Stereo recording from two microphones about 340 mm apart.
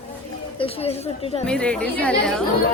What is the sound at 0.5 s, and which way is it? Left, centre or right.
Speech, centre.